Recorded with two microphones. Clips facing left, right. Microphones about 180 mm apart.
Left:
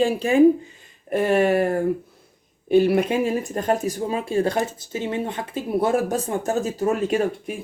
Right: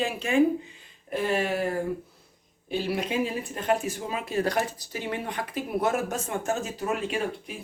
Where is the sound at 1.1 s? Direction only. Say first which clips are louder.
Left 8 dB; 50° left (ahead or behind).